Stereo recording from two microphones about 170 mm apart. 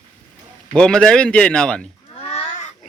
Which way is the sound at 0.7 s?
5° left (ahead or behind).